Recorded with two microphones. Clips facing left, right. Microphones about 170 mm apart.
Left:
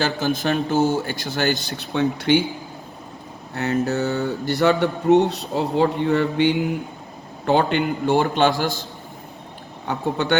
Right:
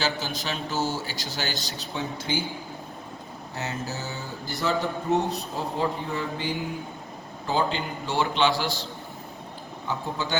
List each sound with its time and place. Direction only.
0.0 s a man's voice: 55° left (ahead or behind); by 2.4 s 70° left (ahead or behind)
3.5 s a man's voice: 60° left (ahead or behind)
9.8 s a man's voice: 65° left (ahead or behind)